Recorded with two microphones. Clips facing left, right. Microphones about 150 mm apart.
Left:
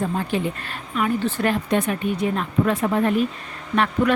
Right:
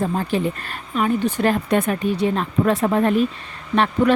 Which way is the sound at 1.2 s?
15° right (ahead or behind).